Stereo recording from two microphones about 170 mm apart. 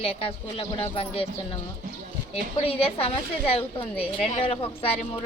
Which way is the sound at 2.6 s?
35° left (ahead or behind).